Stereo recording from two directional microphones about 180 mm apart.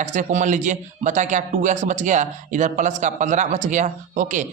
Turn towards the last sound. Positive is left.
turn(degrees=-45)  # may be behind; listen again after turning